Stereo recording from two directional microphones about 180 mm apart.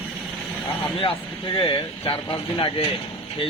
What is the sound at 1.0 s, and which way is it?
Speech, 30° left (ahead or behind).